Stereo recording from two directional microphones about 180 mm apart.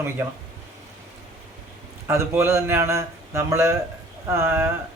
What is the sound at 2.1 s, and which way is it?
Speech, 15° right (ahead or behind).